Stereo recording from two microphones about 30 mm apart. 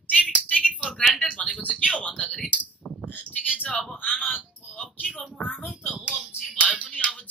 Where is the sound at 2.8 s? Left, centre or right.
Left.